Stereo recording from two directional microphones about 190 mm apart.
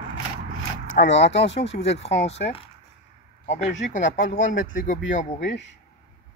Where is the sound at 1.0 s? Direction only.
70° left (ahead or behind).